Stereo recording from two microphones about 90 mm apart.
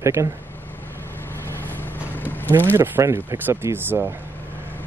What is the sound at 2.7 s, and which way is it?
Speech, 25° right (ahead or behind).